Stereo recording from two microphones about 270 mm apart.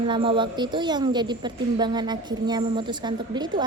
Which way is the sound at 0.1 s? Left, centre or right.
Centre.